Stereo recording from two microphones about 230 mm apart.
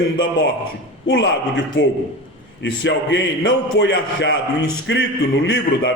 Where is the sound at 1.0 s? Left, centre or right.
Left.